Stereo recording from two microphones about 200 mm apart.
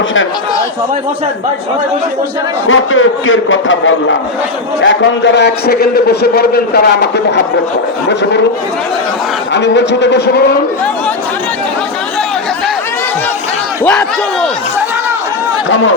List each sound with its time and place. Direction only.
2.6 s a man's voice: 80° left; by 7.4 s 60° left (ahead or behind)
9.5 s a man's voice: 60° left (ahead or behind)